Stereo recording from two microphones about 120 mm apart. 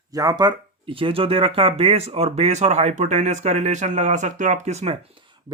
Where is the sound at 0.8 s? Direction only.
50° right (ahead or behind).